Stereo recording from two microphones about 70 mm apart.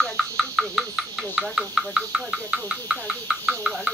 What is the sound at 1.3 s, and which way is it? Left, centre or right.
Speech, centre.